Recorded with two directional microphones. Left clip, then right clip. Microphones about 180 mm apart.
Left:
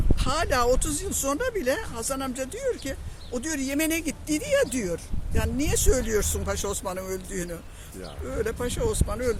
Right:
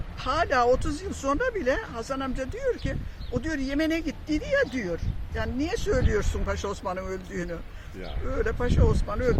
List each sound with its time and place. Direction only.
0.2 s speech: 15° left (ahead or behind)